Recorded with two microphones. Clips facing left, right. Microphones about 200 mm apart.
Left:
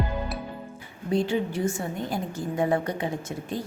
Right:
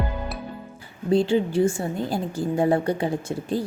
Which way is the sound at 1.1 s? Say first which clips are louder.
Right 5 dB; 30° right (ahead or behind).